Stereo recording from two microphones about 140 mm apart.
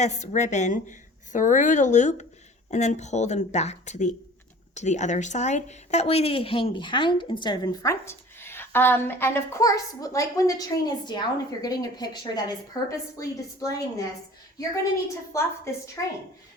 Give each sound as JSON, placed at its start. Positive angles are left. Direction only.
{"t": 0.0, "sound": "a woman's voice", "side_deg": 55}
{"t": 15.3, "sound": "a woman's voice", "side_deg": 20}